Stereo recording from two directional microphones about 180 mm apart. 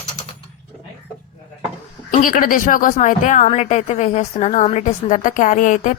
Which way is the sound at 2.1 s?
50° left (ahead or behind).